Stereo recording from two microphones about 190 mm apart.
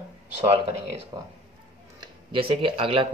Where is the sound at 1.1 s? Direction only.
20° right (ahead or behind).